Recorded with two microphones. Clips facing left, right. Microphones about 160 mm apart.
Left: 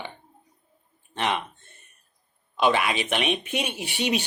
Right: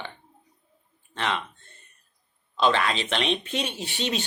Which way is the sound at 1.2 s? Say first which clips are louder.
Left 2 dB; 15° left (ahead or behind).